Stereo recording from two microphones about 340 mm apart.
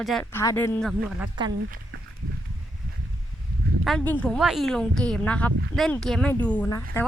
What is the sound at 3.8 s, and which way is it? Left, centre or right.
Speech, centre.